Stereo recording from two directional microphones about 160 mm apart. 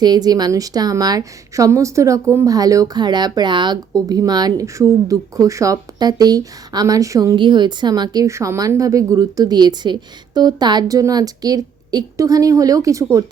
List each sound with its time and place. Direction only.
0.0 s a woman's voice: 25° right (ahead or behind)